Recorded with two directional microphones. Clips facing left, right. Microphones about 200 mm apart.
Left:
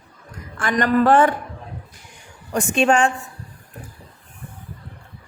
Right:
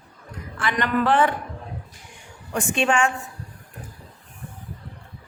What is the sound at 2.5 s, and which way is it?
Speech, 40° left (ahead or behind).